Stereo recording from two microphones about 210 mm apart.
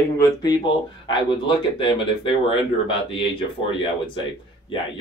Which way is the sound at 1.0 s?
25° left (ahead or behind).